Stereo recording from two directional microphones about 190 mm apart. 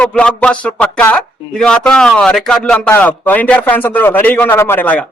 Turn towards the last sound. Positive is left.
turn(degrees=10)  # may be behind; listen again after turning